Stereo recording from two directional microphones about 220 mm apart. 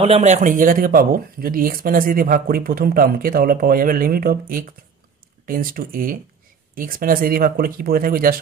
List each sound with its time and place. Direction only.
0.0 s speech: 30° right (ahead or behind)